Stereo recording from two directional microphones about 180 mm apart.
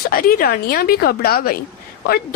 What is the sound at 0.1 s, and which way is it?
A woman's voice, 55° left (ahead or behind).